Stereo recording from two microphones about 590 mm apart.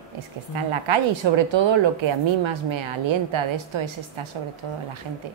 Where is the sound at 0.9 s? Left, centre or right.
Right.